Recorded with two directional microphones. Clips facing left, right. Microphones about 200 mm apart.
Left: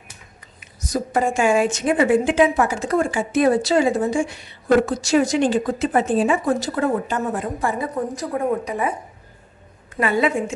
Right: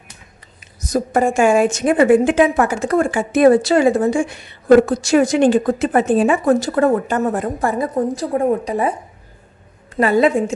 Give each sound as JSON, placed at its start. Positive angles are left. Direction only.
{"t": 0.9, "sound": "a woman's voice", "side_deg": -50}
{"t": 8.1, "sound": "a woman's voice", "side_deg": -30}
{"t": 9.9, "sound": "a woman's voice", "side_deg": -40}